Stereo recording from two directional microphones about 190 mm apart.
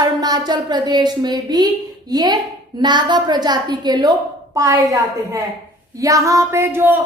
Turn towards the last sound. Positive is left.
turn(degrees=-10)  # may be behind; listen again after turning